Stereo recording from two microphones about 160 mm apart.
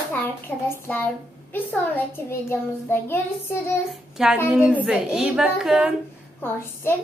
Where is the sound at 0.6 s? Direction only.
10° left (ahead or behind).